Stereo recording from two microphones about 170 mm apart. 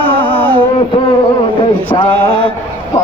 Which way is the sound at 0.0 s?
30° right (ahead or behind).